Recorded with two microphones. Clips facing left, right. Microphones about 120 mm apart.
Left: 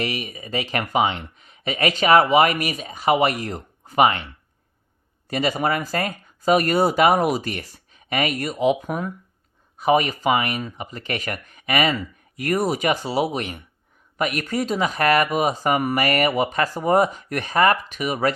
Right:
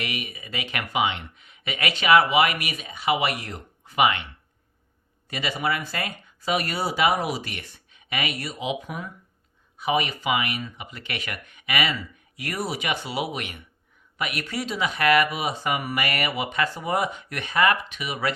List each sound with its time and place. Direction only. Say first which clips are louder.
0.0 s speech: left 5 dB; 35° left (ahead or behind)
5.3 s speech: left 5 dB; 40° left (ahead or behind)